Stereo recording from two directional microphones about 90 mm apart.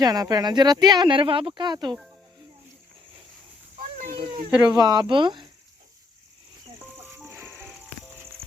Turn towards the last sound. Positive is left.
turn(degrees=-30)  # may be behind; listen again after turning